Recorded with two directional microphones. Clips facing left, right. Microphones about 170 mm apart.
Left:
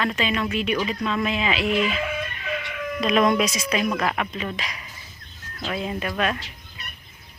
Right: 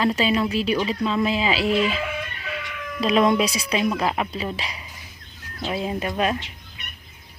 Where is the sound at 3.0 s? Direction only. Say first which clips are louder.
Right 1 dB; 30° right (ahead or behind).